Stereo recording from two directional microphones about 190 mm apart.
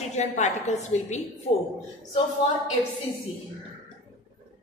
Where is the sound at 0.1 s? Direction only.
35° left (ahead or behind).